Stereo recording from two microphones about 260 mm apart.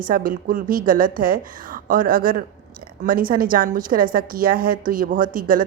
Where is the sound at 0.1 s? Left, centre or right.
Right.